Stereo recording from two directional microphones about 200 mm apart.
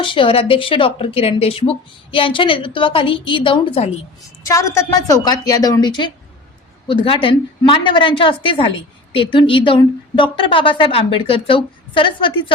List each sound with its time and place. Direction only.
0.0 s speech: 25° left (ahead or behind)
4.4 s speech: 15° left (ahead or behind)